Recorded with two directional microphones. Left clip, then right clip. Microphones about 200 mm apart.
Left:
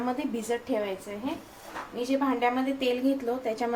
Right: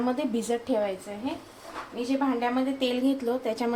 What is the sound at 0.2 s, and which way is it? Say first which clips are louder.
Speech: right 2 dB; 25° right (ahead or behind).